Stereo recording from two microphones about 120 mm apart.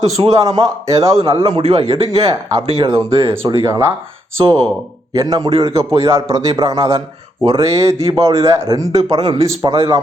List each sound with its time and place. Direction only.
0.3 s a man's voice: 30° right (ahead or behind)
1.5 s a man's voice: 60° right (ahead or behind)
2.0 s speech: 35° right (ahead or behind)
5.5 s a man's voice: 55° right (ahead or behind)
6.0 s a man's voice: 25° right (ahead or behind)